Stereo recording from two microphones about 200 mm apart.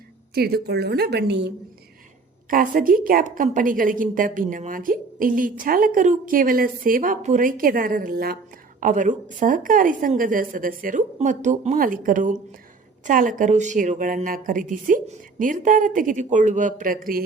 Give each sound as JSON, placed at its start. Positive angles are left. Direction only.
{"t": 0.3, "sound": "a woman's voice", "side_deg": -50}
{"t": 2.5, "sound": "a woman's voice", "side_deg": -45}